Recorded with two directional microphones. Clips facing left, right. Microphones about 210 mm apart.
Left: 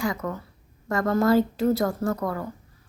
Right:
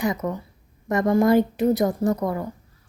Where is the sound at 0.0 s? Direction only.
20° right (ahead or behind).